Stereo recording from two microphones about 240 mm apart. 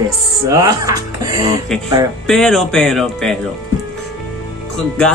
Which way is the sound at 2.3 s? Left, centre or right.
Centre.